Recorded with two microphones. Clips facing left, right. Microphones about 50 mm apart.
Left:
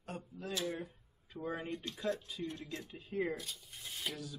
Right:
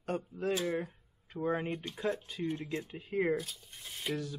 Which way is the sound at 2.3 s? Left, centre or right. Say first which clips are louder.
Right 6 dB; right.